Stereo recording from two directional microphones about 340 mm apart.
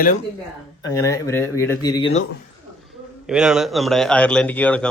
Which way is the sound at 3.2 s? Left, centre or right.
Centre.